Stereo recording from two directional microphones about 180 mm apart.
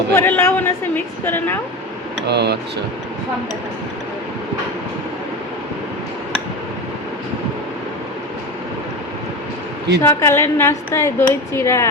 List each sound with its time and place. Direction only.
0.1 s a woman's voice: 15° left (ahead or behind)
2.2 s speech: 70° right (ahead or behind)
10.0 s a woman's voice: 15° left (ahead or behind)